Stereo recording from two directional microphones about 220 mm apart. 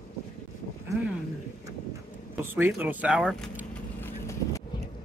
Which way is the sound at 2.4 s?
10° right (ahead or behind).